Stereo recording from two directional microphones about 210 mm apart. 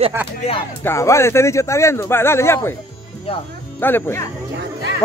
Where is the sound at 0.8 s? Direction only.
15° left (ahead or behind).